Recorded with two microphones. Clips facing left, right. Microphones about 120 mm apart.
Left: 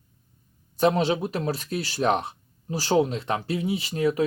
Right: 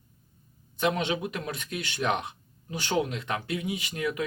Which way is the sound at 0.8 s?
35° left (ahead or behind).